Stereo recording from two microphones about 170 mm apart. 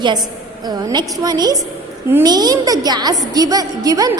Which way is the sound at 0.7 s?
25° right (ahead or behind).